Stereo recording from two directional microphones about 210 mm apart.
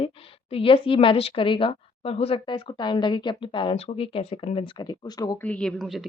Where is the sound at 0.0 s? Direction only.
25° left (ahead or behind).